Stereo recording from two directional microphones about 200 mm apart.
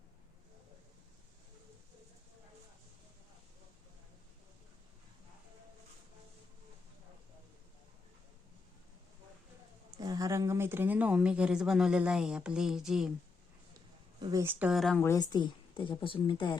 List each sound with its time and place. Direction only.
10.0 s speech: 20° right (ahead or behind); by 13.1 s centre (ahead or behind)
14.2 s speech: 20° right (ahead or behind); by 15.0 s centre (ahead or behind)
15.0 s a woman's voice: 15° left (ahead or behind)